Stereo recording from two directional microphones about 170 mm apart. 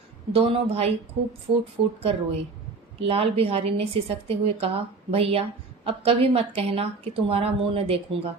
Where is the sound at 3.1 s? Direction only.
35° right (ahead or behind).